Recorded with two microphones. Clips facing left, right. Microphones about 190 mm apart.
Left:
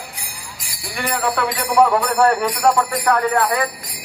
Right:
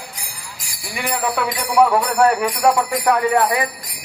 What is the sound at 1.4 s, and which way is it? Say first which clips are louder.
Jingle bell: left 1 dB; 10° right (ahead or behind).